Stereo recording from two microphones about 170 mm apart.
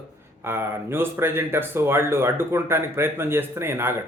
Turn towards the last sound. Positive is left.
turn(degrees=-15)  # may be behind; listen again after turning